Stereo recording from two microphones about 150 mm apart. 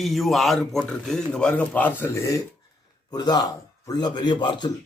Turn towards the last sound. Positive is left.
turn(degrees=30)  # may be behind; listen again after turning